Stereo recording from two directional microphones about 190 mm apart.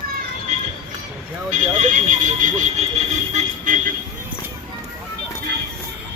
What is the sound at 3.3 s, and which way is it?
Vehicle, 45° right (ahead or behind).